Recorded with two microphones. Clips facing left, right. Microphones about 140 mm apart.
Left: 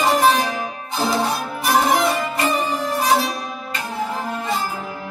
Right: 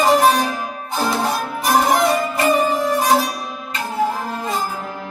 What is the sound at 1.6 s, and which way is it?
Music, 45° right (ahead or behind).